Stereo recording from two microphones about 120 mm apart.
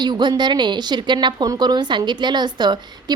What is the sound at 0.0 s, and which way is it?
A woman's voice, 35° right (ahead or behind).